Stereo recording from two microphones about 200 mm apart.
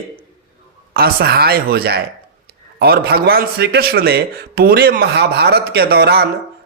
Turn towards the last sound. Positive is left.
turn(degrees=-50)  # may be behind; listen again after turning